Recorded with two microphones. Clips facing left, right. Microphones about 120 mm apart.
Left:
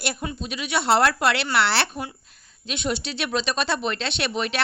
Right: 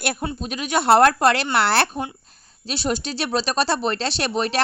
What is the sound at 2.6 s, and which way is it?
A woman's voice, 35° right (ahead or behind).